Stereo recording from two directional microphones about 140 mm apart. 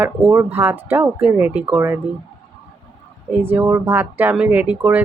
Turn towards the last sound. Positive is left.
turn(degrees=-10)  # may be behind; listen again after turning